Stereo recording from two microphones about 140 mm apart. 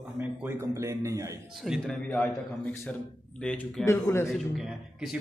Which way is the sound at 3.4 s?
5° left (ahead or behind).